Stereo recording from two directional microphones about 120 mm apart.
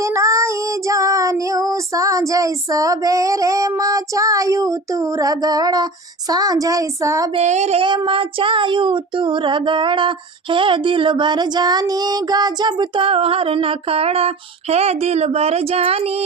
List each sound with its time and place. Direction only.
0.0 s child singing: 25° right (ahead or behind)
7.3 s a sound: 70° right (ahead or behind)
7.8 s child singing: 45° right (ahead or behind)